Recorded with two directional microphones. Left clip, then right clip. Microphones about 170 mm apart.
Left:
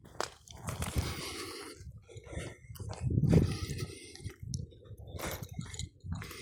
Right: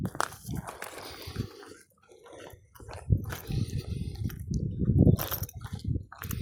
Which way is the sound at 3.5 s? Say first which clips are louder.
Right 2 dB; 40° left (ahead or behind).